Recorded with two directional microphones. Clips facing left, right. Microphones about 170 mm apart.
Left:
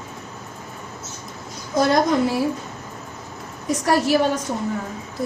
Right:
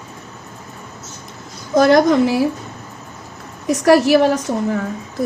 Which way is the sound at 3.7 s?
80° right.